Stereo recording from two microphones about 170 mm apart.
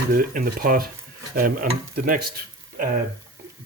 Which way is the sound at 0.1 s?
55° right (ahead or behind).